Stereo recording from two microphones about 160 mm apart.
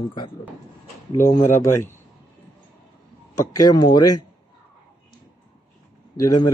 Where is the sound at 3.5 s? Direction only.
25° left (ahead or behind).